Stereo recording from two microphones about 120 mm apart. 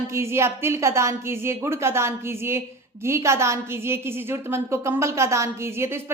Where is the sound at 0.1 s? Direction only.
20° right (ahead or behind).